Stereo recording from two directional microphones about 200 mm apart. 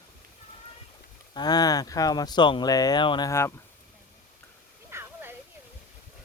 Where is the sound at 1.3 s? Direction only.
20° left (ahead or behind).